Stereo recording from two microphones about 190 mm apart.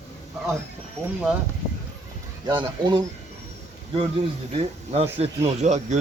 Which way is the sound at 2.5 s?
20° right (ahead or behind).